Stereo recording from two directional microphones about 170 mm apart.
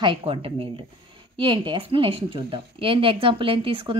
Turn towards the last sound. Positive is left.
turn(degrees=-30)  # may be behind; listen again after turning